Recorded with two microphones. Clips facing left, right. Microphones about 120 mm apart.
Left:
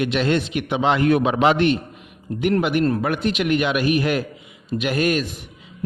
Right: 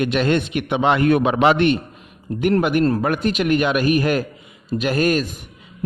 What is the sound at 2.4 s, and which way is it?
A man's voice, 45° right (ahead or behind).